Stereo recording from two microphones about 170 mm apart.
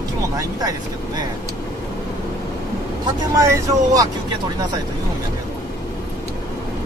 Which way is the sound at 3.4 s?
20° right (ahead or behind).